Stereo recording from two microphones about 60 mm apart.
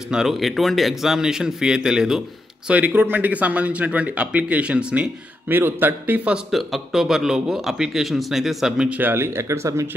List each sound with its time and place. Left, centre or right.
0.1 s a man's voice: centre
2.7 s speech: right
5.5 s speech: right
6.5 s a man's voice: centre
9.0 s speech: right